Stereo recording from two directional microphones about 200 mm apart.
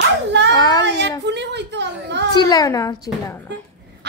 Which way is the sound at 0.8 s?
60° right (ahead or behind).